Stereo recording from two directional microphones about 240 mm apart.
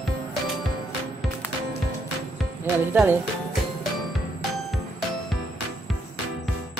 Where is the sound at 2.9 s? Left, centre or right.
Centre.